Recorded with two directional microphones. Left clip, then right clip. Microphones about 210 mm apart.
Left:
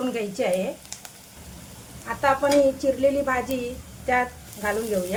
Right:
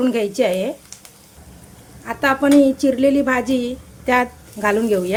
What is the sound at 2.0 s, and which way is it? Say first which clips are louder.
A woman's voice: right 4 dB; 45° right (ahead or behind).